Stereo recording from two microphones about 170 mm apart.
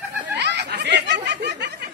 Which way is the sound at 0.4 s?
85° right.